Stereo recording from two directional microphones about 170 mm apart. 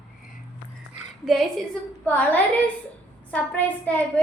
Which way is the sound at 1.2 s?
Centre (ahead or behind).